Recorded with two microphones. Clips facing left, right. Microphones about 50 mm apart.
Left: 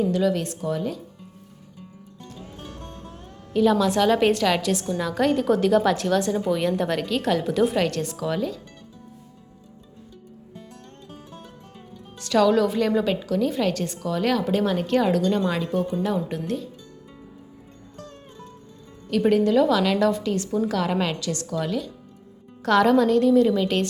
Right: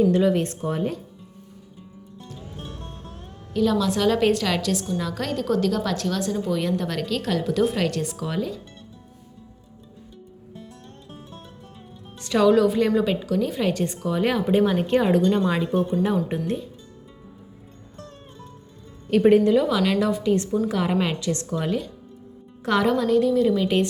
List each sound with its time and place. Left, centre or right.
0.1 s speech: right
3.5 s a woman's voice: centre
12.2 s a woman's voice: centre
19.0 s speech: right
19.5 s a woman's voice: centre; by 21.8 s right
22.6 s a woman's voice: centre
22.9 s a woman's voice: centre
23.6 s a woman's voice: centre